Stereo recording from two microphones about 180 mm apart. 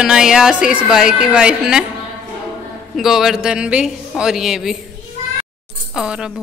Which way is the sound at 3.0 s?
Centre (ahead or behind).